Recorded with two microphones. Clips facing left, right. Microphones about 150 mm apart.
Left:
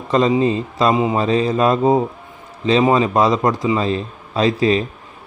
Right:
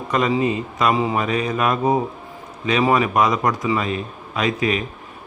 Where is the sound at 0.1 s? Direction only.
30° left (ahead or behind).